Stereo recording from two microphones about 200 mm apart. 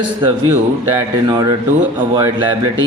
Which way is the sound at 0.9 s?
20° right (ahead or behind).